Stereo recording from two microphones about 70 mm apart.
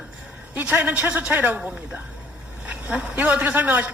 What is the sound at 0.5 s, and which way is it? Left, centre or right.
Speech, right.